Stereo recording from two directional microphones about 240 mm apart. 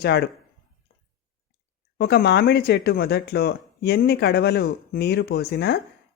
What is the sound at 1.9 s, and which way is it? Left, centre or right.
Speech, left.